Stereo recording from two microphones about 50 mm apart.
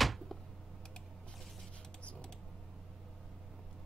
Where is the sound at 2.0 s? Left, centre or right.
Left.